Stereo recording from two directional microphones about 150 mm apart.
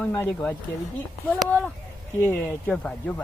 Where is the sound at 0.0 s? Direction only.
10° left (ahead or behind).